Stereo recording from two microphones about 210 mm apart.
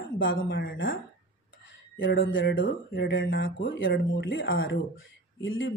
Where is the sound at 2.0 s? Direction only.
60° left (ahead or behind).